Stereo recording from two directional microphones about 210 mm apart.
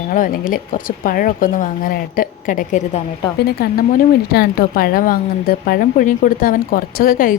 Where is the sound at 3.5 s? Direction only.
50° left (ahead or behind).